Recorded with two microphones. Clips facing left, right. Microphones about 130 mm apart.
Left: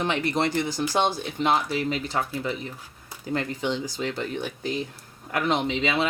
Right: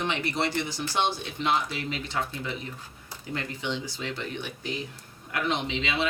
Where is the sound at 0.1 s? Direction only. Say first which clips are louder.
Left 4 dB; 50° left (ahead or behind).